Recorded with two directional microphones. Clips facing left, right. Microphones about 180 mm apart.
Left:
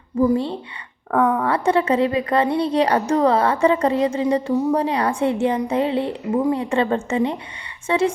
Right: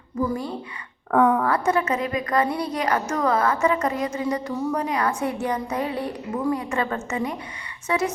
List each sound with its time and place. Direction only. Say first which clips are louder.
0.2 s a woman's voice: left 7 dB; 30° left (ahead or behind)
1.1 s speech: even; centre (ahead or behind)
1.5 s a woman's voice: left 4 dB; 30° left (ahead or behind)